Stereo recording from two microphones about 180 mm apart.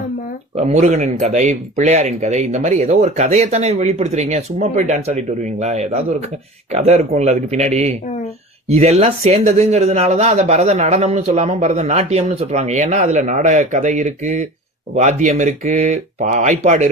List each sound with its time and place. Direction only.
0.5 s speech: 40° right (ahead or behind)